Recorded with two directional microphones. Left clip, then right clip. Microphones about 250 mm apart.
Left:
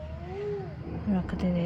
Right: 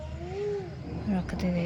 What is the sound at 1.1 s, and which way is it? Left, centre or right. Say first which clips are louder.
Speech: left 1 dB; centre.